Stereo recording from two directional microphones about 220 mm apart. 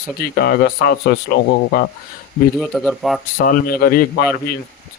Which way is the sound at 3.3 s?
45° left (ahead or behind).